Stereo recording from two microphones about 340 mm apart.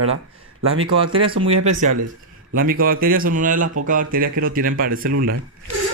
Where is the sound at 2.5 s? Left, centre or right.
Right.